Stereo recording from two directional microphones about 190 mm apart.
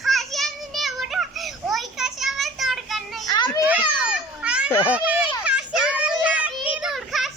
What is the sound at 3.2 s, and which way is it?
Children playing, 20° left (ahead or behind).